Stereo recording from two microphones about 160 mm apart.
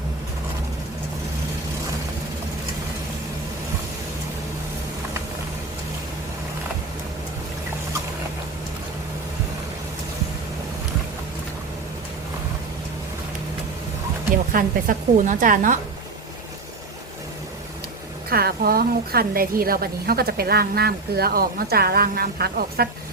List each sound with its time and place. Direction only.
14.5 s a woman's voice: 55° right (ahead or behind)
18.3 s a woman's voice: 70° right (ahead or behind)